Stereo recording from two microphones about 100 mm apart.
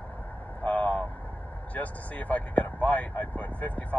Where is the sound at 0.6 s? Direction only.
15° left (ahead or behind).